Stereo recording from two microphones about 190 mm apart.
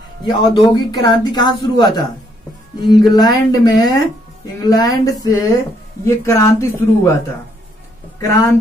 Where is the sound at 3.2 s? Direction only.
20° left (ahead or behind).